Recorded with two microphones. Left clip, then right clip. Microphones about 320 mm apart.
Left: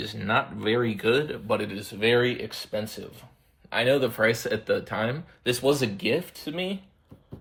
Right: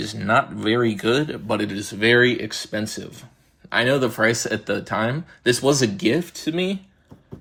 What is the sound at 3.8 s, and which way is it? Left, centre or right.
Speech, centre.